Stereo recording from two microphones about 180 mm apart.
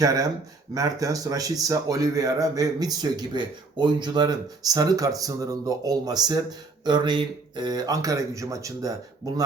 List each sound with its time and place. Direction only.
0.0 s speech: 20° right (ahead or behind)